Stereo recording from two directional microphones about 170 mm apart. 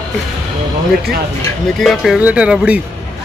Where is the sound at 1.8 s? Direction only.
Centre (ahead or behind).